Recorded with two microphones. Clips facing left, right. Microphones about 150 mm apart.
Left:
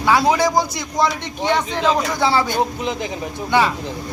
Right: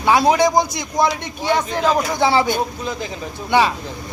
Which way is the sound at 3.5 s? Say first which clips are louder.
Right 1 dB; 15° right (ahead or behind).